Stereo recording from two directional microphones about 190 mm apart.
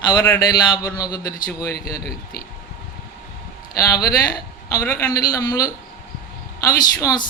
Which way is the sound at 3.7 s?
20° left (ahead or behind).